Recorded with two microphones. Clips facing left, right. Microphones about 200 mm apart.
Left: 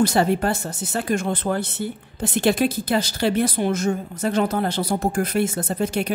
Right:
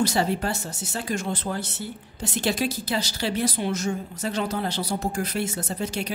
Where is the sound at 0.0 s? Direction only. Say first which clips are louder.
Left 5 dB; 55° left (ahead or behind).